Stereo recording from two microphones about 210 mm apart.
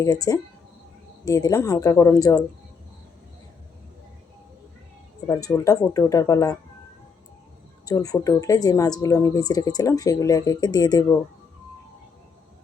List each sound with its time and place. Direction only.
0.0 s a woman's voice: 15° left (ahead or behind)
5.2 s a woman's voice: 15° left (ahead or behind)
7.9 s a woman's voice: 15° left (ahead or behind)